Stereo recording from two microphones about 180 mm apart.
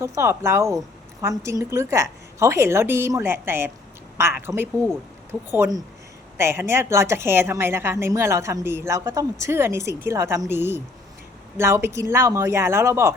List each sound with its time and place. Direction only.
0.0 s a woman's voice: 15° right (ahead or behind)